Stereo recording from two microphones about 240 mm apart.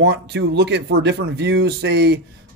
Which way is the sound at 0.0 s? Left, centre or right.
Right.